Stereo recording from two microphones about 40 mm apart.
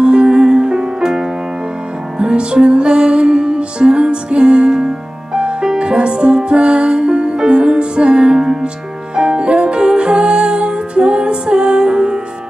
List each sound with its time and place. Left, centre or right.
0.0 s music: right